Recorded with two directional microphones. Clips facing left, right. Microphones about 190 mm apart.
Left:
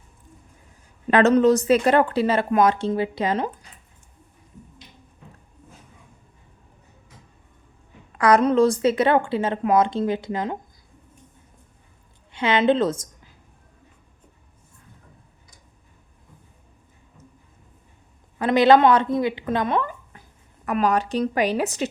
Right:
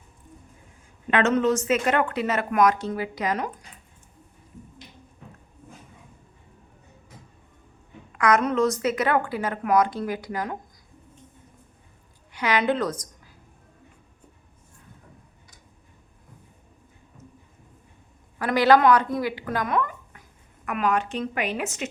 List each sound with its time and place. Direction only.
1.1 s speech: 35° left (ahead or behind)
8.1 s a woman's voice: 30° left (ahead or behind)
12.3 s a woman's voice: 25° left (ahead or behind)
18.3 s a woman's voice: 20° left (ahead or behind)